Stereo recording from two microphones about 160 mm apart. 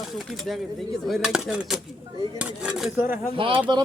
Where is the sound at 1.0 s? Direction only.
Centre (ahead or behind).